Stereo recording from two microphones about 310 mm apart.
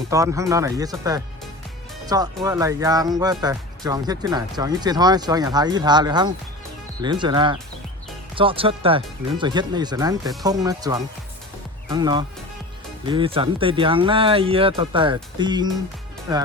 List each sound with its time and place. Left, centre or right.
0.1 s speech: centre